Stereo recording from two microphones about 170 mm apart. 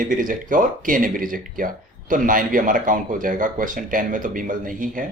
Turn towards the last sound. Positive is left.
turn(degrees=-55)  # may be behind; listen again after turning